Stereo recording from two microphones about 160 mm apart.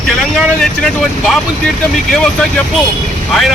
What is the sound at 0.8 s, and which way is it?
Speech, centre (ahead or behind).